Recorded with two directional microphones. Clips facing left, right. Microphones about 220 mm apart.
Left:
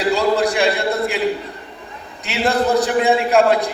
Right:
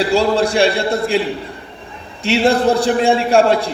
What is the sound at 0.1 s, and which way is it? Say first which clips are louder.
A man's voice: right 2 dB; 30° right (ahead or behind).